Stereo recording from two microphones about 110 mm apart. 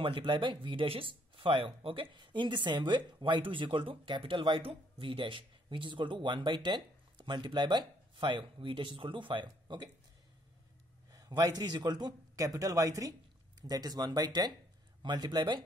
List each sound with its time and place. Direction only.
0.0 s speech: 50° right (ahead or behind)
11.1 s a man's voice: 35° right (ahead or behind)